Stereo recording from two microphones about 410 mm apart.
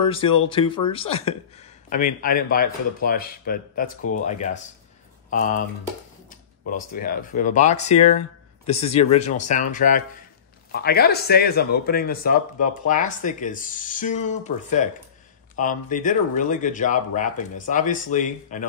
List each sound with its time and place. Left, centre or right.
0.0 s speech: centre
6.7 s speech: left